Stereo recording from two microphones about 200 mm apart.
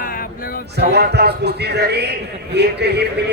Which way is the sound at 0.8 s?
55° right (ahead or behind).